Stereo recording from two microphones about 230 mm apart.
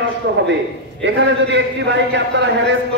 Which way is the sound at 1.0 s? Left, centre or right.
Right.